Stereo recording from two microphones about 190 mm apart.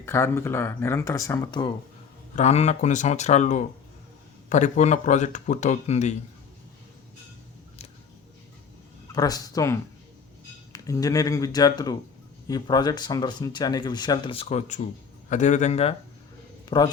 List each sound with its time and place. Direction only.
0.0 s speech: 15° left (ahead or behind)
2.3 s speech: 35° left (ahead or behind)
9.1 s speech: 20° left (ahead or behind)
16.6 s a man's voice: 20° left (ahead or behind)